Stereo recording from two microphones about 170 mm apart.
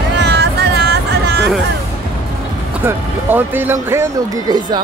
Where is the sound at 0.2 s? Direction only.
75° right (ahead or behind).